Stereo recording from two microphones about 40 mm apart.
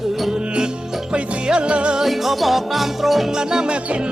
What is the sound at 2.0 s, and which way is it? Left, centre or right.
Music, centre.